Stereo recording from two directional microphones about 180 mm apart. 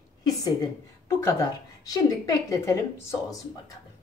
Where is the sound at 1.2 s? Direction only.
20° left (ahead or behind).